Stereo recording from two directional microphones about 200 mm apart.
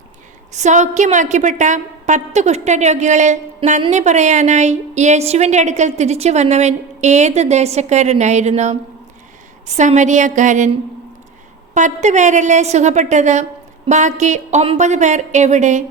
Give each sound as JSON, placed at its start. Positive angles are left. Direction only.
{"t": 0.5, "sound": "a woman's voice", "side_deg": -35}
{"t": 11.7, "sound": "a woman's voice", "side_deg": -35}